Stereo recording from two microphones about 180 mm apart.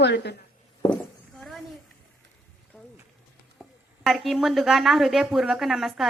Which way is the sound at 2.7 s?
Centre (ahead or behind).